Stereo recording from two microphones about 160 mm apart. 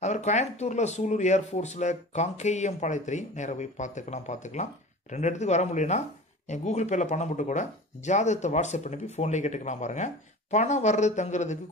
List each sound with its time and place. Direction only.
0.0 s speech: 45° left (ahead or behind)